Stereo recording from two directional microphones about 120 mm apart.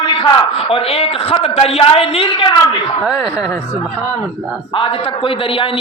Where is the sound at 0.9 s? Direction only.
55° left (ahead or behind).